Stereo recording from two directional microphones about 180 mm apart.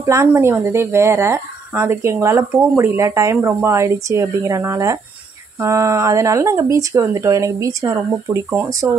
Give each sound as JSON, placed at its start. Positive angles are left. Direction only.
{"t": 0.0, "sound": "speech", "side_deg": -15}